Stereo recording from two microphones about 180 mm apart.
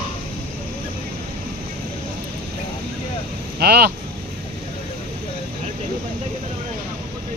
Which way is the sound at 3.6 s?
60° right (ahead or behind).